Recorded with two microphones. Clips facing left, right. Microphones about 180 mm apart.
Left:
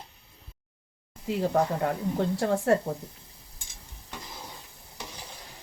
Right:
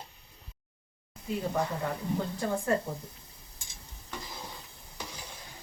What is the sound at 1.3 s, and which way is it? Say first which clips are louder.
Speech: left 6 dB; 75° left (ahead or behind).